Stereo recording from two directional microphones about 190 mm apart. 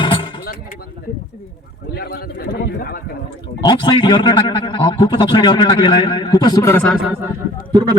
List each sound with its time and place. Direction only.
0.0 s a sound: 25° left (ahead or behind)
2.0 s a man's voice: 55° left (ahead or behind)
3.6 s speech: 25° left (ahead or behind)
6.8 s speech: 5° right (ahead or behind)